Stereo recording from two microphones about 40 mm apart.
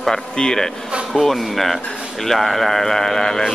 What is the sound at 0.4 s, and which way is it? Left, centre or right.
Speech, left.